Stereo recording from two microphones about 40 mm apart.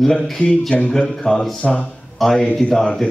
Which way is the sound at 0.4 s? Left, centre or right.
Left.